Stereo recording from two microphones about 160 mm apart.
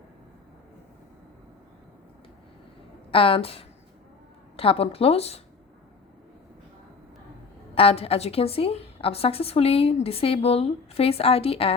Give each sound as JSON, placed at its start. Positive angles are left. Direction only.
{"t": 3.1, "sound": "a woman's voice", "side_deg": 35}
{"t": 7.8, "sound": "a woman's voice", "side_deg": 35}